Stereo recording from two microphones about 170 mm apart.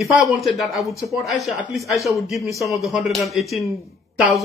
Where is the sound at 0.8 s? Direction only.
20° left (ahead or behind).